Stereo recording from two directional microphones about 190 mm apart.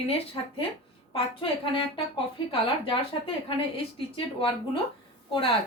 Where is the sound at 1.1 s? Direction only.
30° left (ahead or behind).